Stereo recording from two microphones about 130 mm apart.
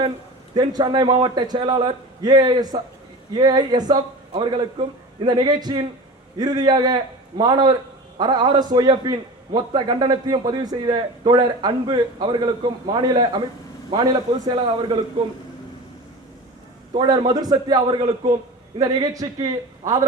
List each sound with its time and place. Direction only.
0.5 s a man's voice: 35° right (ahead or behind)
16.9 s a man's voice: 35° right (ahead or behind)